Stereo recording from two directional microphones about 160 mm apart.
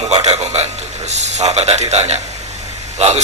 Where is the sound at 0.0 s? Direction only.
45° right (ahead or behind).